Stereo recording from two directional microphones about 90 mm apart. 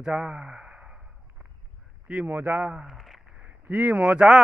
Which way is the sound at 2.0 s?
15° right (ahead or behind).